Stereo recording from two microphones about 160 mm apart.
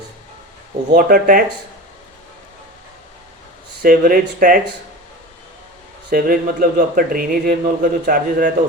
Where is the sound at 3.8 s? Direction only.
60° right (ahead or behind).